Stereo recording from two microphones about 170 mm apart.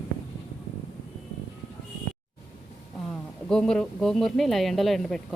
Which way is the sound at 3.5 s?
5° left (ahead or behind).